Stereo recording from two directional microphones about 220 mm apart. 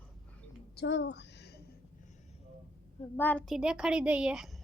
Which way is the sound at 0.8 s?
55° left (ahead or behind).